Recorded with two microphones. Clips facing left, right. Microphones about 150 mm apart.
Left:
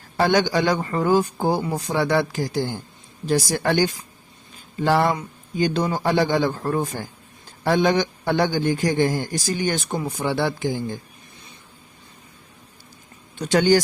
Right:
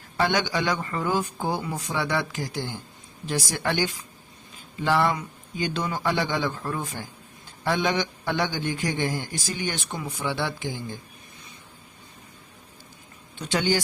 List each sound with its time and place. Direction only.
0.2 s a man's voice: 35° left (ahead or behind)
13.4 s speech: 45° left (ahead or behind)